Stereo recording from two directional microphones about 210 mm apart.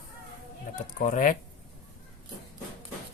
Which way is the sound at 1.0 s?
40° left (ahead or behind).